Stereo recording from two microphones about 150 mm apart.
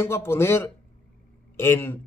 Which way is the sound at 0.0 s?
15° left (ahead or behind).